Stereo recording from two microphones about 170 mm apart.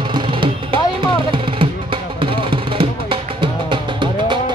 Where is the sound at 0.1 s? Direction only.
30° right (ahead or behind).